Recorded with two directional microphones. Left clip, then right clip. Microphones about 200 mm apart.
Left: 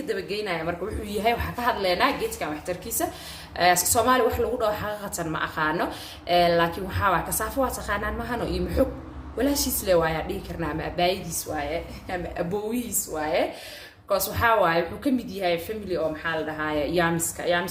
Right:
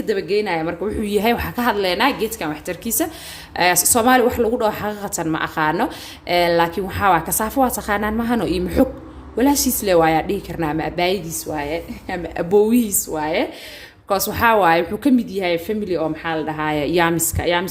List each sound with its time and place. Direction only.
0.1 s a woman's voice: 40° right (ahead or behind)